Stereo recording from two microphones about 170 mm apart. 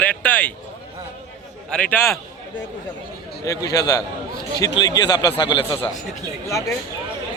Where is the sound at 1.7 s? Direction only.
10° left (ahead or behind).